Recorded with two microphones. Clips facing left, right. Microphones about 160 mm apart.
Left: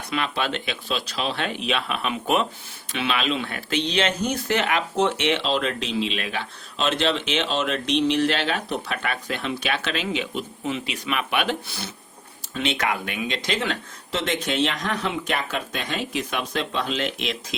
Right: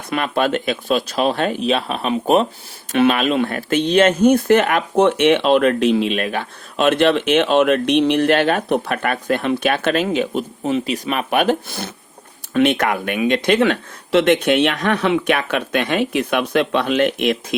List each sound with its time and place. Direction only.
0.1 s speech: 50° right (ahead or behind)
2.9 s speech: 50° right (ahead or behind)